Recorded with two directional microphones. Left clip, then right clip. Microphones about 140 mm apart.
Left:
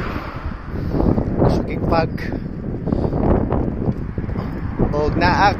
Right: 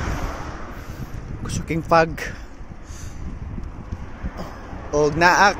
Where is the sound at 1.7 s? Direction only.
50° right (ahead or behind).